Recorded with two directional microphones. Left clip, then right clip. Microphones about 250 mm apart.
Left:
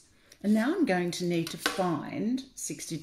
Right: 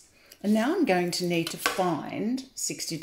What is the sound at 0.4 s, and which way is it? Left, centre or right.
Speech, centre.